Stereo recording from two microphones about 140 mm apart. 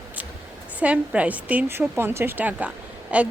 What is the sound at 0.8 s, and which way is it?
A woman's voice, 10° right (ahead or behind).